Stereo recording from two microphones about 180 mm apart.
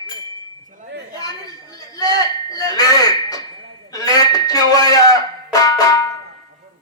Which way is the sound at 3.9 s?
20° left (ahead or behind).